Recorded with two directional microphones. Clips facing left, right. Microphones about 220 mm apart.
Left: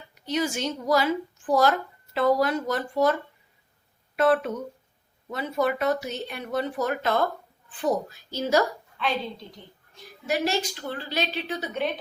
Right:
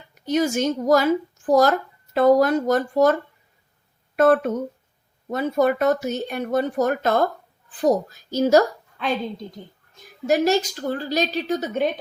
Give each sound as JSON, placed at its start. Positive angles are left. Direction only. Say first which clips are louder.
{"t": 0.1, "sound": "a woman's voice", "louder": "right 6 dB", "side_deg": -45}